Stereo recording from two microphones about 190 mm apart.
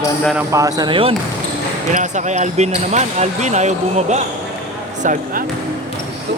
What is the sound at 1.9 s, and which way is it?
Speech, 40° right (ahead or behind).